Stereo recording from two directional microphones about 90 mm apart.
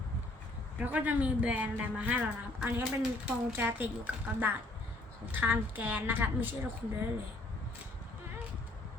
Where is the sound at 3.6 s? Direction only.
20° right (ahead or behind).